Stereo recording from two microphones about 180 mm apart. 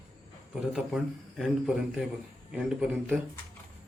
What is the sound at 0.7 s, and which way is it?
A man's voice, centre (ahead or behind).